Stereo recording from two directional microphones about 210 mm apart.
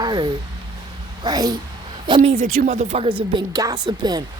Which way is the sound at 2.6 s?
35° right (ahead or behind).